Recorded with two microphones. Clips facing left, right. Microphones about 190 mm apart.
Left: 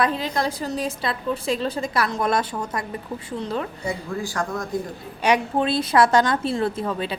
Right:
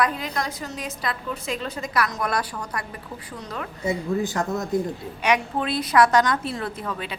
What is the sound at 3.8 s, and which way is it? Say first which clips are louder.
Speech: right 4 dB; 20° right (ahead or behind).